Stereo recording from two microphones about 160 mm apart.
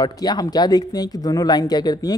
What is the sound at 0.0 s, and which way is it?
Speech, 25° left (ahead or behind).